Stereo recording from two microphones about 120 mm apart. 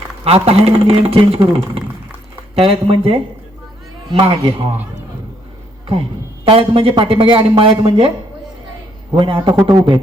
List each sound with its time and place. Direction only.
0.3 s speech: 55° right (ahead or behind)
6.5 s speech: 50° right (ahead or behind)
9.1 s speech: 45° right (ahead or behind)